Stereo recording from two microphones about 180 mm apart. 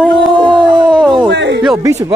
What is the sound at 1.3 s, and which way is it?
Speech, 75° right (ahead or behind).